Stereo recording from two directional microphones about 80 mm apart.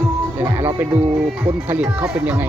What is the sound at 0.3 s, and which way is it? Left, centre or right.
Music, right.